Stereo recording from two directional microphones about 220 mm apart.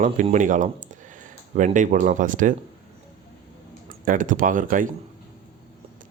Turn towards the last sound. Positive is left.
turn(degrees=-35)  # may be behind; listen again after turning